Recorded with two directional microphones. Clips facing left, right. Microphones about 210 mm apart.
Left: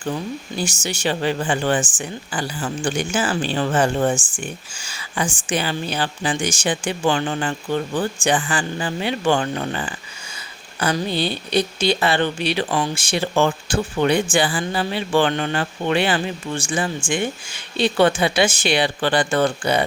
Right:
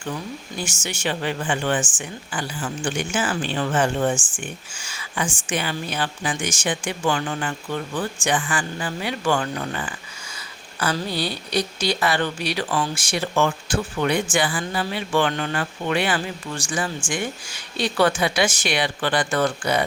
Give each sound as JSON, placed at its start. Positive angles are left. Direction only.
{"t": 0.0, "sound": "speech", "side_deg": 35}